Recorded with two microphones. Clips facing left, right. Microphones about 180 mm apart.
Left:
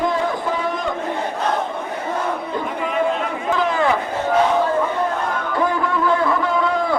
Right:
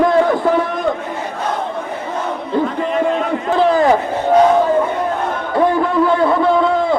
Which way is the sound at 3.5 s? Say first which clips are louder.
Right 7 dB; 35° right (ahead or behind).